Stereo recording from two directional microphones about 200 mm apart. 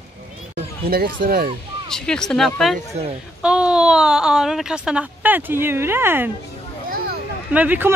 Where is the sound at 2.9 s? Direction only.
30° right (ahead or behind).